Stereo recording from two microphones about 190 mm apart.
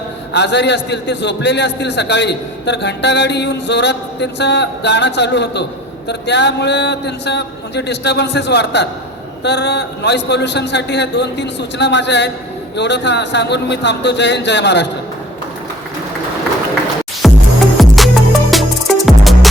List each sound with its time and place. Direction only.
0.3 s a man's voice: 65° left (ahead or behind)
17.2 s music: centre (ahead or behind)